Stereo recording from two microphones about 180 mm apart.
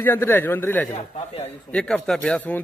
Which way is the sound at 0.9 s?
35° left (ahead or behind).